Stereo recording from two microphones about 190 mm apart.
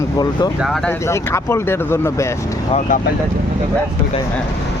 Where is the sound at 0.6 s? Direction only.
Centre (ahead or behind).